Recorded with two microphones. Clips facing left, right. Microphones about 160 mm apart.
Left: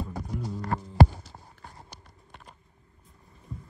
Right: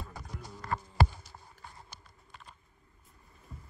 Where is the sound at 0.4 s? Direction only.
35° left (ahead or behind).